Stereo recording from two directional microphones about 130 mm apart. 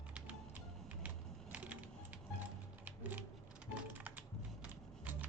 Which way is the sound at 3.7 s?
15° right (ahead or behind).